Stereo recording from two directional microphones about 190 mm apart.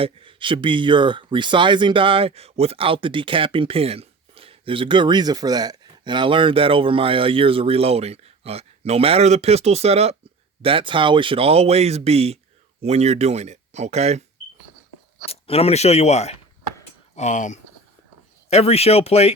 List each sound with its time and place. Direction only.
0.0 s speech: 25° right (ahead or behind)
15.3 s speech: 30° left (ahead or behind)